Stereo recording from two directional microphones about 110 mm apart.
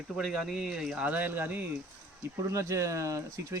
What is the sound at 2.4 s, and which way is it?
Speech, 30° right (ahead or behind).